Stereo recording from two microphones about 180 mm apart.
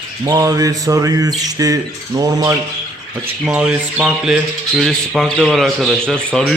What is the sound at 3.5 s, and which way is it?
Speech, 5° right (ahead or behind).